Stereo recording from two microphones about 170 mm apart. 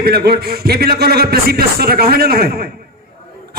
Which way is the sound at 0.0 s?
65° right (ahead or behind).